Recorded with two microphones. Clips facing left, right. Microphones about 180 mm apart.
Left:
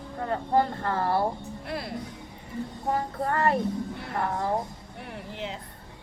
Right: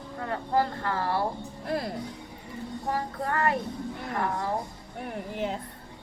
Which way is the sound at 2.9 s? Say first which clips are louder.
Left 2 dB; 25° left (ahead or behind).